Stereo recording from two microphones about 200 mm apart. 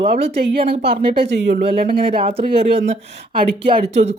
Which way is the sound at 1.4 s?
60° right (ahead or behind).